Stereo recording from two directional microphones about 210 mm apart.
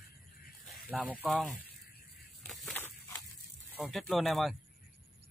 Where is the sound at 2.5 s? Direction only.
Centre (ahead or behind).